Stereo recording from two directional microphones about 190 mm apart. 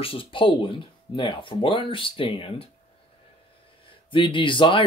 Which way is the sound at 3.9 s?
25° left (ahead or behind).